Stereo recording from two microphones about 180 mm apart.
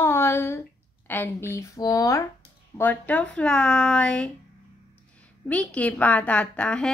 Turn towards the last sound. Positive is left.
turn(degrees=5)  # may be behind; listen again after turning